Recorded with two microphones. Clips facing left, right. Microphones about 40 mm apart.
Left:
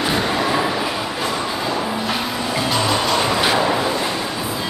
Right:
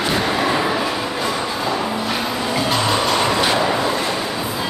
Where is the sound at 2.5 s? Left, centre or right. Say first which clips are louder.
Even; centre.